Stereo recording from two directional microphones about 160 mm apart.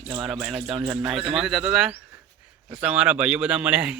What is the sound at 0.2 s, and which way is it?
Speech, 5° right (ahead or behind).